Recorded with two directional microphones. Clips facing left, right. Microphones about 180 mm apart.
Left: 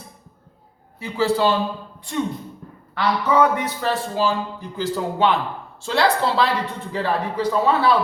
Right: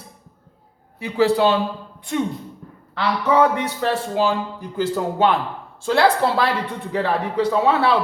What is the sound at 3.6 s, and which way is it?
Speech, 65° right (ahead or behind).